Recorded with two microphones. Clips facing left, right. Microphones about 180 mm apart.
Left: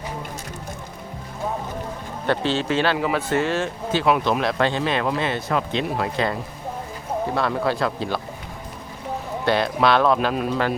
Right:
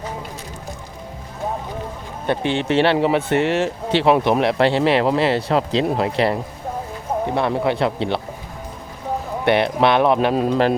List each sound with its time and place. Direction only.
2.2 s speech: 15° right (ahead or behind)
7.3 s speech: 20° right (ahead or behind)
9.4 s speech: 25° right (ahead or behind)